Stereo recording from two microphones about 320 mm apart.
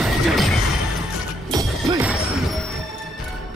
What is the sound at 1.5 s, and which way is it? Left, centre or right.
Music, centre.